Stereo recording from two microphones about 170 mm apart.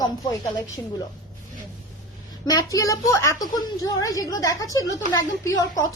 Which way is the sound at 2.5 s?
20° left (ahead or behind).